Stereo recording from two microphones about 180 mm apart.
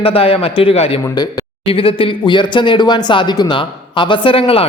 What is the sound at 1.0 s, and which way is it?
A man's voice, 20° left (ahead or behind).